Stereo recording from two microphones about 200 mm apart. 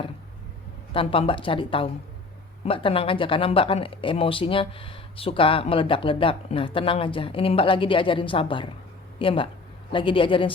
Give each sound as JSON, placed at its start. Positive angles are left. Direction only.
{"t": 0.9, "sound": "speech", "side_deg": 25}